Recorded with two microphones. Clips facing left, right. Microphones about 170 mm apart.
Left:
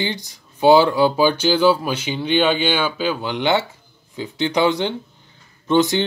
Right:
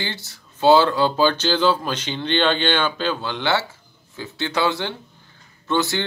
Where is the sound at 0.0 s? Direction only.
15° left (ahead or behind).